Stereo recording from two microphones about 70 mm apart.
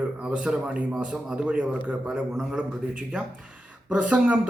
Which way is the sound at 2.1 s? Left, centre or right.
Centre.